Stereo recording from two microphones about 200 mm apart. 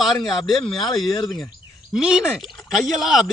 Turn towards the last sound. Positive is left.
turn(degrees=0)  # may be behind; listen again after turning